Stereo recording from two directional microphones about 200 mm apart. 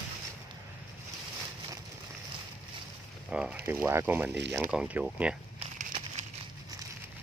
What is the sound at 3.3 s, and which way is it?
Speech, 5° right (ahead or behind).